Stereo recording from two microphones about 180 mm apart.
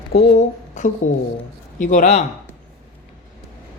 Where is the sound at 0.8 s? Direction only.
40° left (ahead or behind).